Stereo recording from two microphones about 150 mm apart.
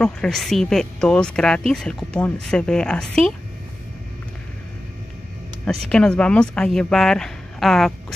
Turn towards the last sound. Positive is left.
turn(degrees=0)  # may be behind; listen again after turning